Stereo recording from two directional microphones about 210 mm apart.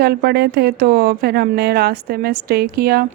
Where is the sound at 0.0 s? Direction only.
50° right (ahead or behind).